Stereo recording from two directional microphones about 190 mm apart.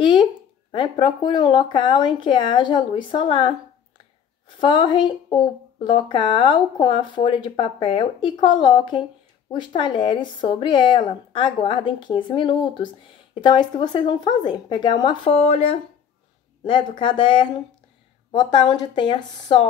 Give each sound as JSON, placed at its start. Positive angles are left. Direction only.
{"t": 0.0, "sound": "speech", "side_deg": 25}
{"t": 4.6, "sound": "speech", "side_deg": 25}